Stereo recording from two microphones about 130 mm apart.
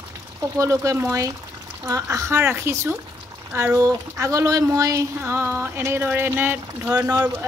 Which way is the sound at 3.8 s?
25° right (ahead or behind).